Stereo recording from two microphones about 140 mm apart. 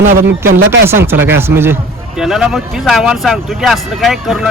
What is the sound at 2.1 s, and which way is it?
A man's voice, 5° right (ahead or behind).